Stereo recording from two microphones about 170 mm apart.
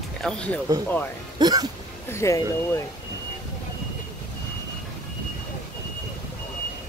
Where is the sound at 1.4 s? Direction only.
25° right (ahead or behind).